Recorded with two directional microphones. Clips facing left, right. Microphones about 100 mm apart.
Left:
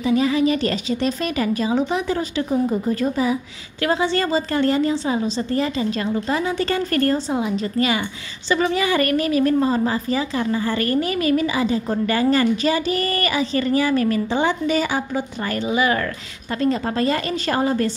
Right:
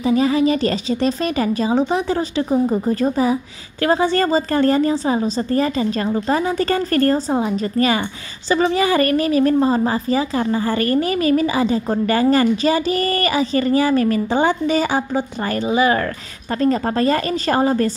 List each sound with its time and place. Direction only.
0.0 s a woman's voice: 35° right (ahead or behind)